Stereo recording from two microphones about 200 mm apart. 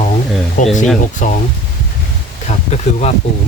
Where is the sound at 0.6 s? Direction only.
40° left (ahead or behind).